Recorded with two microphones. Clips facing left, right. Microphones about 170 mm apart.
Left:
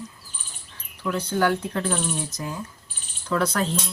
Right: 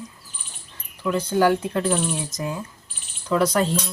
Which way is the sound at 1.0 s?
10° right (ahead or behind).